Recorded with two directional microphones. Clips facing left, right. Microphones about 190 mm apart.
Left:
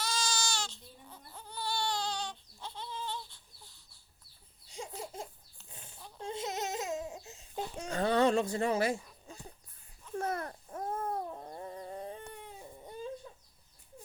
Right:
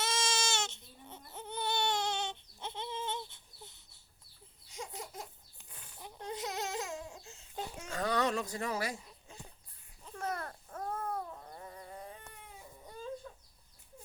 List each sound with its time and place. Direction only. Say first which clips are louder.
0.0 s baby cry: right 1 dB; 25° right (ahead or behind)
4.7 s laughter: left 2 dB; 30° left (ahead or behind)
5.7 s a sound: left 3 dB; 25° left (ahead or behind)
6.2 s baby cry: left 2 dB; 25° left (ahead or behind)
7.8 s a sound: left 5 dB; 30° left (ahead or behind)
10.2 s babbling: left 4 dB; 25° left (ahead or behind)